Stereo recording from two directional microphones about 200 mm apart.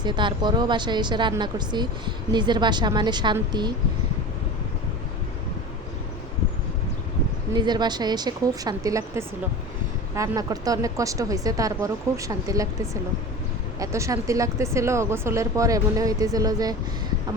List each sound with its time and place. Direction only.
0.0 s speech: 25° right (ahead or behind)
7.5 s speech: 20° right (ahead or behind)